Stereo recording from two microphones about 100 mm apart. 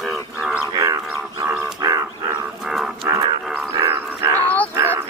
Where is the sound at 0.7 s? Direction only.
35° right (ahead or behind).